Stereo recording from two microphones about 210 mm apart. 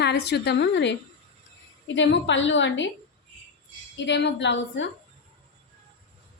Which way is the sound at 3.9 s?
55° left (ahead or behind).